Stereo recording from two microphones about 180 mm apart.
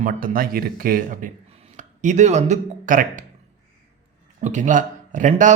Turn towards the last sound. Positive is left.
turn(degrees=-45)  # may be behind; listen again after turning